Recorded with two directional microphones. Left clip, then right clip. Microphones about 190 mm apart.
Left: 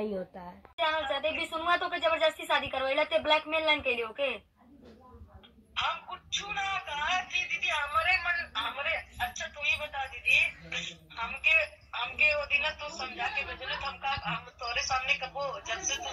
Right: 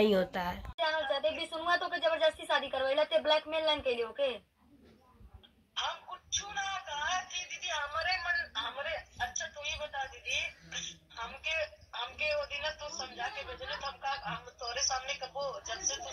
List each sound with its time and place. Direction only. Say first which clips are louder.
0.0 s a woman's voice: right 8 dB; 5° left (ahead or behind)
0.7 s speech: left 3 dB; 35° right (ahead or behind)
5.8 s speech: left 5 dB; 35° right (ahead or behind)